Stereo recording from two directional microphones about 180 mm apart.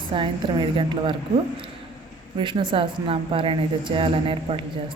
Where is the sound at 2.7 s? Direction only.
30° right (ahead or behind).